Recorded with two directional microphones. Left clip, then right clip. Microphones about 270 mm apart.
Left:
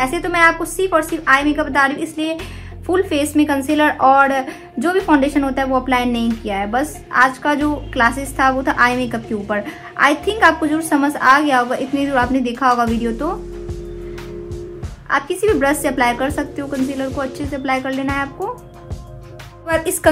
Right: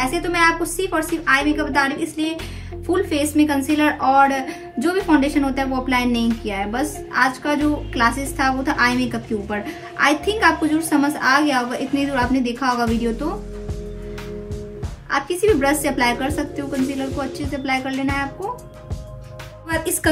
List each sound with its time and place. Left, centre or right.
0.0 s a woman's voice: left
15.0 s a woman's voice: left
19.7 s a woman's voice: left